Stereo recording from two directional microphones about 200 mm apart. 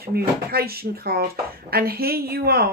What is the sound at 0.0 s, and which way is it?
Speech, 50° right (ahead or behind).